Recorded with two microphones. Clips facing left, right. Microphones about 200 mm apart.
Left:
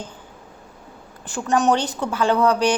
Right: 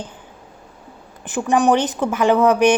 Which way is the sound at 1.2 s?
15° right (ahead or behind).